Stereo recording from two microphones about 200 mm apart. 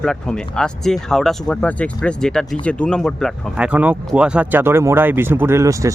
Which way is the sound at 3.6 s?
5° right (ahead or behind).